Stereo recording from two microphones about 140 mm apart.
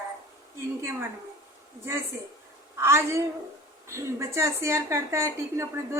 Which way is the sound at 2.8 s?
20° right (ahead or behind).